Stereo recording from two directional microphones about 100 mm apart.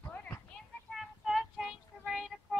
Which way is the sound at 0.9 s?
Centre (ahead or behind).